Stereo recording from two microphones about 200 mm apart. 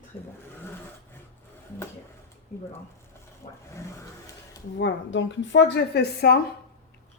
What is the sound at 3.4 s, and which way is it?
Vehicle, 25° left (ahead or behind).